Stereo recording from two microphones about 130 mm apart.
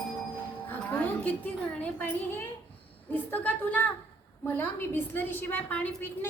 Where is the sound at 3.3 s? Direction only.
10° left (ahead or behind).